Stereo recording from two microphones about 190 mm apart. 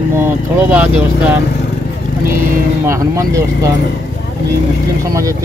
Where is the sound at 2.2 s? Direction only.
45° right (ahead or behind).